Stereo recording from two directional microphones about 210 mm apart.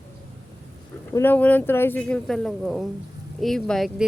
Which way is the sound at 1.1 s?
10° left (ahead or behind).